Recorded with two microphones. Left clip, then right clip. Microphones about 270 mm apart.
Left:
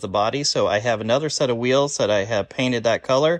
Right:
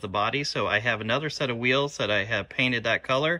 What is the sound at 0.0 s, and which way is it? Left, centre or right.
Speech, centre.